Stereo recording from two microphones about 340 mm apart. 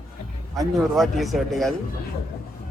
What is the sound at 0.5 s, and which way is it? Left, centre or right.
A man's voice, centre.